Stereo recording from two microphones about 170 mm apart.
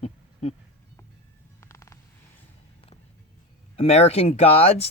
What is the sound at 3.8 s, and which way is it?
Speech, 40° left (ahead or behind).